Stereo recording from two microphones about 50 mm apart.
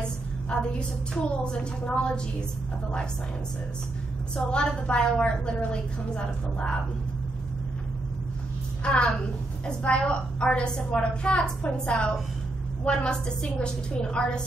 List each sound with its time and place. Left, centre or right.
0.0 s a sound: centre
1.4 s a woman's voice: centre
4.5 s a woman's voice: centre
8.8 s a woman's voice: left